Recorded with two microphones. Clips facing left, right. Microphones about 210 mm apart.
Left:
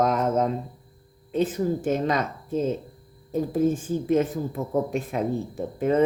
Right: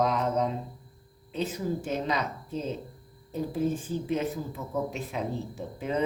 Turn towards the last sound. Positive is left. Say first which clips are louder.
# left 8 dB
turn(degrees=50)  # may be behind; listen again after turning